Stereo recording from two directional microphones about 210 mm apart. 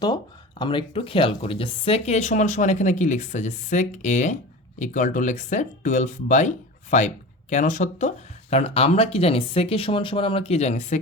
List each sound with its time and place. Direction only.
0.6 s speech: 25° left (ahead or behind)